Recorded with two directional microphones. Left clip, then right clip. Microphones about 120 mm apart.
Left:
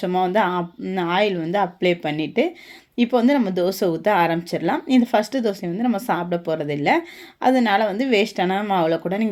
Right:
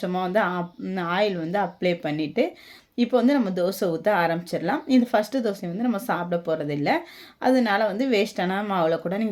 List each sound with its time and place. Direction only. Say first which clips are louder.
0.0 s speech: left 4 dB; 20° left (ahead or behind)